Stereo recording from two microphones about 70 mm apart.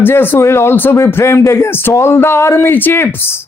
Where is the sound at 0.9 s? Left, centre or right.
Left.